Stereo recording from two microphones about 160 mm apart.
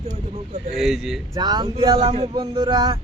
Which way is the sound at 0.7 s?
Centre (ahead or behind).